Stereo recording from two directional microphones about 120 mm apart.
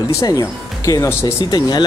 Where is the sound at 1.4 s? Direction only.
35° left (ahead or behind).